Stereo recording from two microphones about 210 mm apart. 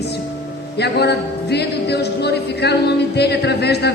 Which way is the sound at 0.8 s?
50° left (ahead or behind).